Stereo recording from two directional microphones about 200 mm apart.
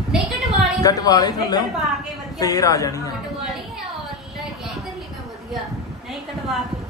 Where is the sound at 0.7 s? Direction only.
20° left (ahead or behind).